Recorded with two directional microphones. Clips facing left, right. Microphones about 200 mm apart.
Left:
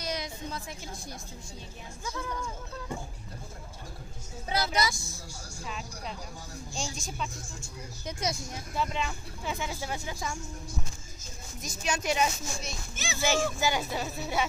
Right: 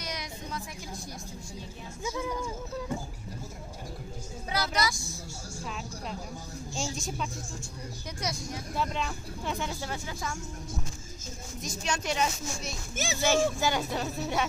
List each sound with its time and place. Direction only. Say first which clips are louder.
0.0 s music: left 3 dB; 30° left (ahead or behind)
2.0 s speech: right 4 dB; 10° right (ahead or behind)
4.5 s a woman's voice: left 1 dB; 25° left (ahead or behind)
6.7 s speech: right 3 dB; centre (ahead or behind)
8.7 s speech: left 1 dB; centre (ahead or behind)
11.6 s speech: left 1 dB; 5° left (ahead or behind)
12.9 s speech: right 7 dB; 45° right (ahead or behind)
13.2 s speech: right 2 dB; 10° left (ahead or behind)